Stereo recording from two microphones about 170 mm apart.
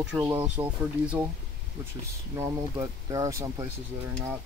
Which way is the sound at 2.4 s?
20° right (ahead or behind).